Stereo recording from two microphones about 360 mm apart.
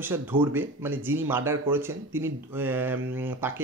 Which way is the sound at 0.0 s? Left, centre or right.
Centre.